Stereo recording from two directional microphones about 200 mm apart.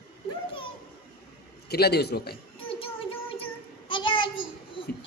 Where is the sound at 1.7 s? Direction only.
55° left (ahead or behind).